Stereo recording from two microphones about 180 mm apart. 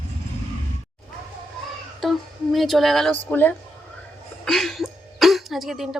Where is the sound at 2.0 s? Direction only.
Centre (ahead or behind).